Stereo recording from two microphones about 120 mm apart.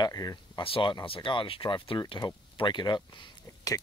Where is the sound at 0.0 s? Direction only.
30° left (ahead or behind).